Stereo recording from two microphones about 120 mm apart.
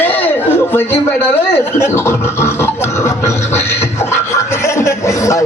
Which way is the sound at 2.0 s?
20° left (ahead or behind).